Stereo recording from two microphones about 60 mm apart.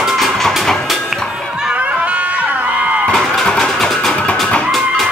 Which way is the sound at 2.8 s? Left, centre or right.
Right.